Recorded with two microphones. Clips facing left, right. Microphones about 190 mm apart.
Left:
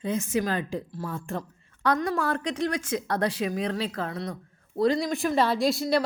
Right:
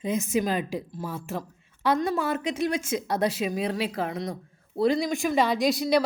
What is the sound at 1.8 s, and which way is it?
Speech, 20° right (ahead or behind).